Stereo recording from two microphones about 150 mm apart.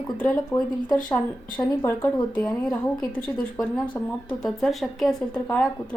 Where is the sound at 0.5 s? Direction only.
20° left (ahead or behind).